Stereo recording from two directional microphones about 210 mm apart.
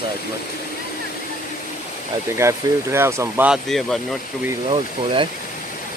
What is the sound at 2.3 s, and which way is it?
Speech, 10° right (ahead or behind).